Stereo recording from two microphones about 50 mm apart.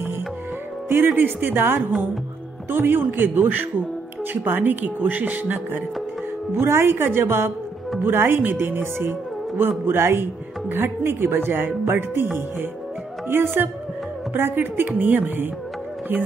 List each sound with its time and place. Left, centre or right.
0.8 s speech: right
6.5 s a woman's voice: right
13.3 s speech: right